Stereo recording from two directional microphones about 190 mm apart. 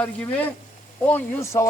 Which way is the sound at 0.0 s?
5° left (ahead or behind).